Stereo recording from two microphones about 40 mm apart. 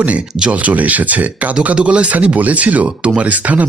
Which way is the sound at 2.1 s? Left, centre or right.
Right.